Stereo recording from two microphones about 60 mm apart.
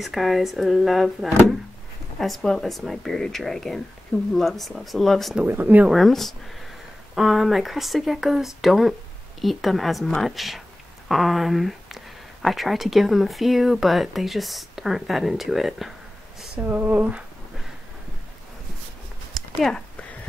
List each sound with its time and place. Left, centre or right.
0.0 s speech: centre
5.5 s speech: right
5.9 s speech: centre
16.5 s speech: right
19.7 s a sound: centre